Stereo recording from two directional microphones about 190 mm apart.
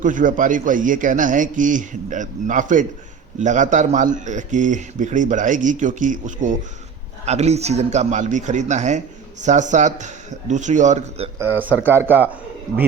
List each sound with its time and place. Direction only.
0.0 s a man's voice: 45° right (ahead or behind)
11.3 s speech: 10° right (ahead or behind)